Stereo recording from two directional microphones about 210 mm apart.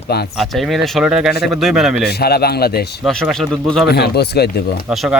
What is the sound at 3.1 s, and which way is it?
Speech, centre (ahead or behind).